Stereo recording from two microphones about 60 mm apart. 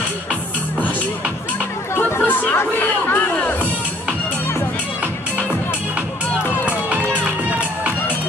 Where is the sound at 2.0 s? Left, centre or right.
Left.